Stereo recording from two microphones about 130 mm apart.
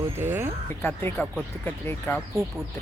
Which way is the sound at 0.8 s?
15° left (ahead or behind).